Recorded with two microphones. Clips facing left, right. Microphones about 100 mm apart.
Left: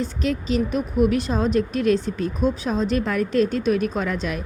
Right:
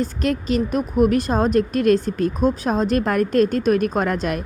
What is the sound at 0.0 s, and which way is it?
Speech, 50° right (ahead or behind).